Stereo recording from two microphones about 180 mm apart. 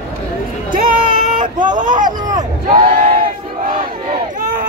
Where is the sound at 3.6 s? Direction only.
50° right (ahead or behind).